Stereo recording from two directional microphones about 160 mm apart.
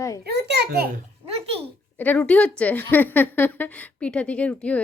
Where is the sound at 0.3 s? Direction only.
90° right.